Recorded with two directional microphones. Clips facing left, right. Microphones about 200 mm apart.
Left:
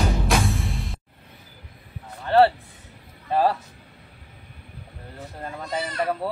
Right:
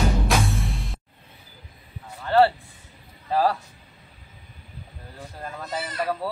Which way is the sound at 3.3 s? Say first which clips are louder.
Left 1 dB; 20° left (ahead or behind).